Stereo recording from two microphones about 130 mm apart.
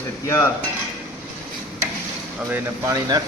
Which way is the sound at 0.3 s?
20° left (ahead or behind).